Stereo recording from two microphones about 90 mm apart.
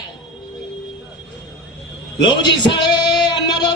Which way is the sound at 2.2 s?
60° left (ahead or behind).